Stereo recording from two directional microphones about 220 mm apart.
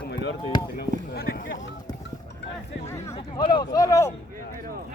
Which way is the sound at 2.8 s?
10° left (ahead or behind).